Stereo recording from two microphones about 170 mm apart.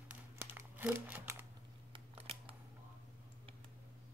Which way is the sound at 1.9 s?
35° right (ahead or behind).